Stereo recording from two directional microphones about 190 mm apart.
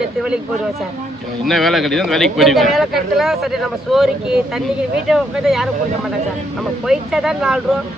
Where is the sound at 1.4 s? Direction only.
Centre (ahead or behind).